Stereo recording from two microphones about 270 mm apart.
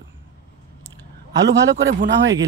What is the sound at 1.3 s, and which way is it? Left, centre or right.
A man's voice, right.